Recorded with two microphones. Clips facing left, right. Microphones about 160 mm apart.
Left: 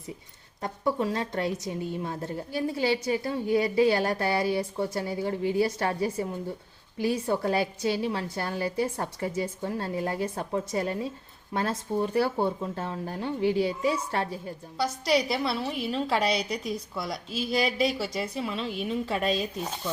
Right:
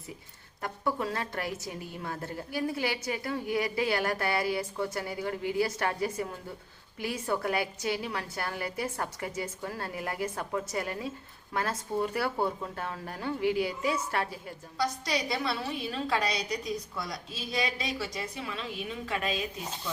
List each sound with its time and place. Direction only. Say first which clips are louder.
0.6 s a woman's voice: left 4 dB; 25° left (ahead or behind)